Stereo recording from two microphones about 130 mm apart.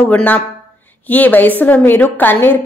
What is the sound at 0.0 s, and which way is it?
A woman's voice, 10° left (ahead or behind).